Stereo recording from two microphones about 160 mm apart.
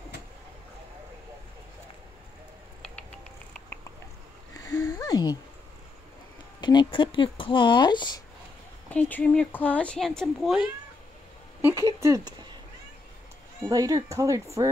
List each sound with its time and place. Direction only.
4.6 s a sound: 20° left (ahead or behind)
6.6 s speech: 30° left (ahead or behind)
8.8 s speech: 10° left (ahead or behind)
11.6 s speech: 20° right (ahead or behind)
13.7 s speech: 20° right (ahead or behind)